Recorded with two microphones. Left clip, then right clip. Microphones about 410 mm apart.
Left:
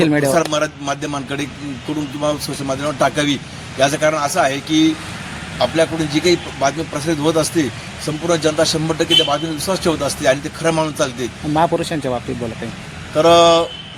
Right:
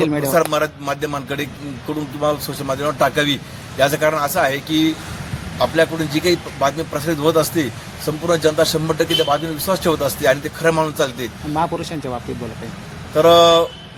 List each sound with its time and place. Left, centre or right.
0.0 s speech: right
0.3 s a man's voice: right
11.5 s speech: right
13.1 s a man's voice: right